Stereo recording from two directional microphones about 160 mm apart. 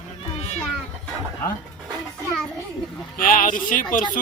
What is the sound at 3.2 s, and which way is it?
Speech, 55° left (ahead or behind).